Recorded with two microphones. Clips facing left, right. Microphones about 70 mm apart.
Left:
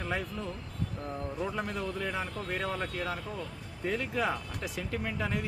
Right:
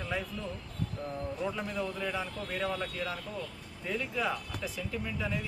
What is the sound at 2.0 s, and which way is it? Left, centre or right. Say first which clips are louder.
Speech: left 1 dB; left.